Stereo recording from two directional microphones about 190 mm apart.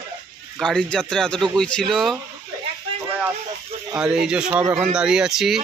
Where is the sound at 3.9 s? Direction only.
5° right (ahead or behind).